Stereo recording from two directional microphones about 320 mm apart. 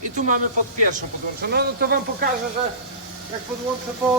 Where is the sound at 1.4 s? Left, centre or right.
Right.